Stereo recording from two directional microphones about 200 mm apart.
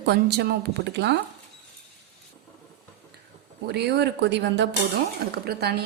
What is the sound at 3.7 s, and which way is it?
A woman's voice, 55° right (ahead or behind).